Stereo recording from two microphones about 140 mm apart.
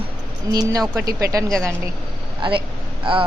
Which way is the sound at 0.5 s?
25° right (ahead or behind).